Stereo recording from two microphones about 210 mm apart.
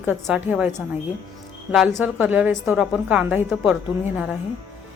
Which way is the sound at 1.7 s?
5° right (ahead or behind).